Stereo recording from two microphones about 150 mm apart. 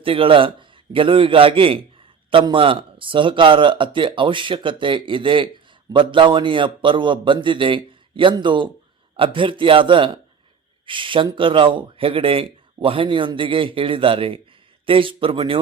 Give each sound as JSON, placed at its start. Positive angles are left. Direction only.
{"t": 0.0, "sound": "a man's voice", "side_deg": -35}